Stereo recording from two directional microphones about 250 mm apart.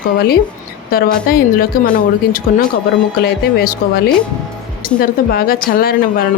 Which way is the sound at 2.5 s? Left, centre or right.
Left.